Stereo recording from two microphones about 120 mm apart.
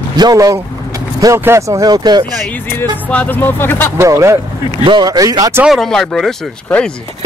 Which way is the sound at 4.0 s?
25° right (ahead or behind).